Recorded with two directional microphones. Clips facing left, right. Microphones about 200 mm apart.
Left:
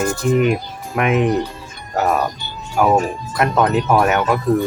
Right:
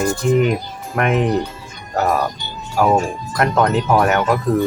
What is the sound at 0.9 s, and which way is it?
Speech, 5° left (ahead or behind).